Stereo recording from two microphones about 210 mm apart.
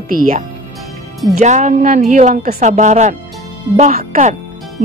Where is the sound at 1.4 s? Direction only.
35° right (ahead or behind).